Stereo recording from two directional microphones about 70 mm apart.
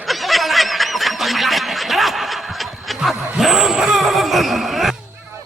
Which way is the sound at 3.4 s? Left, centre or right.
Centre.